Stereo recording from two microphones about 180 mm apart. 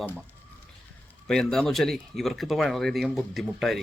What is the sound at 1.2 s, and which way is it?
Speech, 5° left (ahead or behind).